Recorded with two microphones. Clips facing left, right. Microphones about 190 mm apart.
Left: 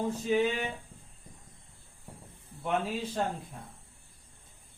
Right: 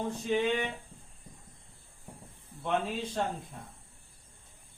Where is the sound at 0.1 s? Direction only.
10° left (ahead or behind).